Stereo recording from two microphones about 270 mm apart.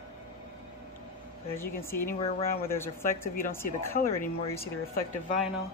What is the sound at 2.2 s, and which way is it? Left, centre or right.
Speech, left.